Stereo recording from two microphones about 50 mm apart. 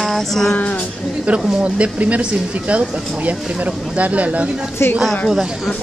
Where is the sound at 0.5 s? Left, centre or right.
Left.